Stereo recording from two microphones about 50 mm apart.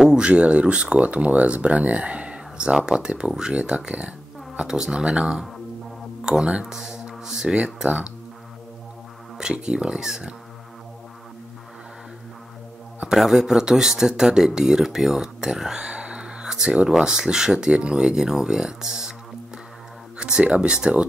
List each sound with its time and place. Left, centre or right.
0.2 s speech: right
9.4 s speech: centre
13.1 s speech: centre
15.9 s a sound: right
16.9 s speech: centre
20.2 s speech: centre